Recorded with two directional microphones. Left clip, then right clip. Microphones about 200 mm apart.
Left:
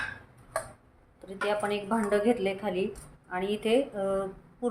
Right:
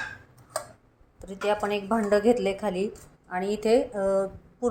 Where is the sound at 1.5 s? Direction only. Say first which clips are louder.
Right 4 dB; 25° right (ahead or behind).